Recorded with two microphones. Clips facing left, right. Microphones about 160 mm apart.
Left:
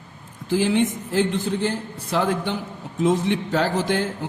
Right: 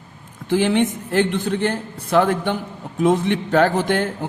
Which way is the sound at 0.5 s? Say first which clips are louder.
Right 2 dB; 65° right (ahead or behind).